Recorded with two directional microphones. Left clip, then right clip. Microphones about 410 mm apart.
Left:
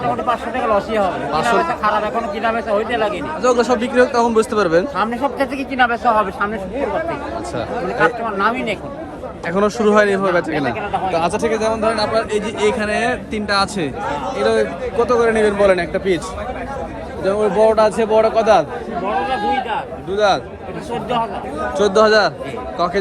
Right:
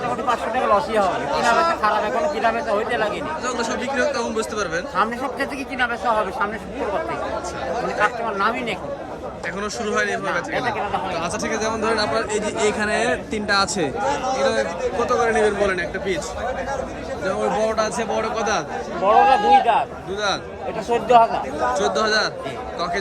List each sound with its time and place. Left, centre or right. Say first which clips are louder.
0.3 s speech: right 2 dB; centre
8.0 s speech: left 5 dB; centre
17.2 s speech: left 7 dB; centre
19.3 s a man's voice: right 4 dB; centre
20.1 s speech: left 8 dB; centre
20.9 s speech: right 6 dB; centre
21.8 s speech: left 10 dB; centre